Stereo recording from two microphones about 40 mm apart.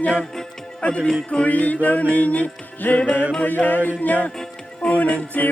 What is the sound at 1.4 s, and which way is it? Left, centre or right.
Music, left.